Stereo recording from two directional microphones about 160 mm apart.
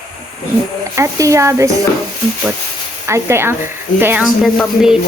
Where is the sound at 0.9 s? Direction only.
20° right (ahead or behind).